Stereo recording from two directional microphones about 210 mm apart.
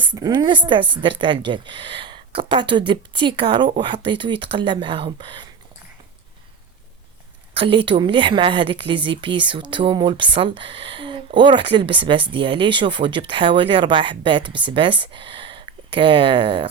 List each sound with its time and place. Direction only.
0.1 s a woman's voice: 20° right (ahead or behind)
7.5 s a woman's voice: 25° right (ahead or behind)